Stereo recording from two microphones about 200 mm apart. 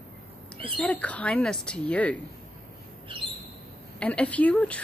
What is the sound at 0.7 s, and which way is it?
Speech, 5° left (ahead or behind).